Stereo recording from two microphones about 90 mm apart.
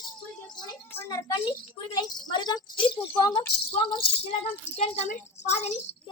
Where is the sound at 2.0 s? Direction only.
55° left (ahead or behind); by 4.0 s 70° left (ahead or behind).